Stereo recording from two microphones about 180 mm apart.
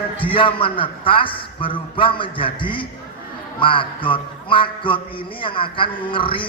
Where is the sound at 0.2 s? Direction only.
30° left (ahead or behind).